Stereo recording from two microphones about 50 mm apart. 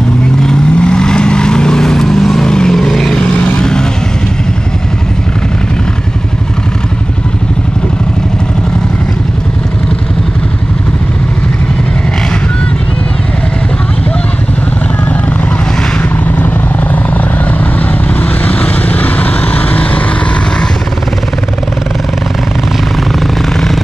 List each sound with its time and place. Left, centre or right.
0.4 s vehicle: centre
3.2 s vehicle: centre
16.0 s vehicle: left
18.2 s vehicle: left